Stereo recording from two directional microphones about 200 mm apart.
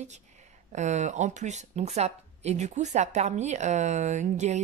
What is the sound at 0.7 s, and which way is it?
Speech, 35° right (ahead or behind).